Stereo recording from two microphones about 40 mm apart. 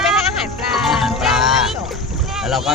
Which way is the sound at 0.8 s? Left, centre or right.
Centre.